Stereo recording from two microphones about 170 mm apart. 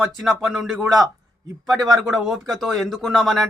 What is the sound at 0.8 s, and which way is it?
Speech, 20° right (ahead or behind).